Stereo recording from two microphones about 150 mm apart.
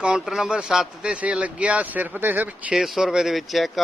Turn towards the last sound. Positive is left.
turn(degrees=0)  # may be behind; listen again after turning